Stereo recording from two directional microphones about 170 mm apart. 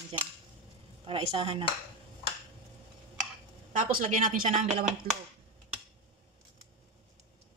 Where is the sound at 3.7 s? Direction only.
55° right (ahead or behind).